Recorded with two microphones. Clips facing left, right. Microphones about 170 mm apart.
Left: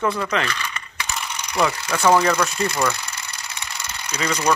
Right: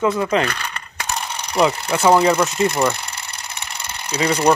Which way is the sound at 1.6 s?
20° right (ahead or behind).